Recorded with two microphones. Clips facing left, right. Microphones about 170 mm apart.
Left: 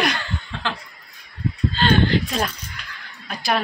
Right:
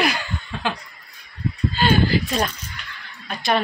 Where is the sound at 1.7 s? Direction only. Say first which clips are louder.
Even; 10° right (ahead or behind).